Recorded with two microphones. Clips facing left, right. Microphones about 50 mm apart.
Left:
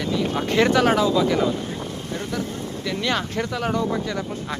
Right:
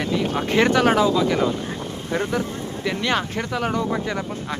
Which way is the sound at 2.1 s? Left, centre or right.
Right.